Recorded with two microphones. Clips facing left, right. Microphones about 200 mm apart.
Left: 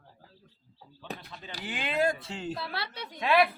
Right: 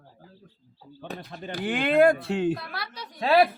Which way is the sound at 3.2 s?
30° right (ahead or behind).